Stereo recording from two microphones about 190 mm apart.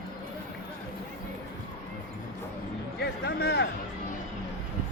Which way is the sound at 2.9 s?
60° left (ahead or behind).